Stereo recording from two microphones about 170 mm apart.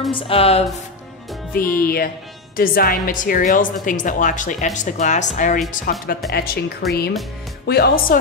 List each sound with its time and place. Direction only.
0.1 s speech: 35° left (ahead or behind)
1.5 s a woman's voice: 60° left (ahead or behind)
6.3 s a woman's voice: 65° left (ahead or behind)
7.6 s speech: 70° left (ahead or behind)